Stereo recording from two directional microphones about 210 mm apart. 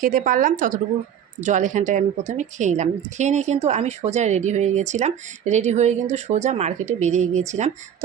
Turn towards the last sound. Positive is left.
turn(degrees=-35)  # may be behind; listen again after turning